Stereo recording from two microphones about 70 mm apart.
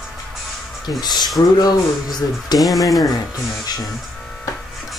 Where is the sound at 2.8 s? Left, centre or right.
Left.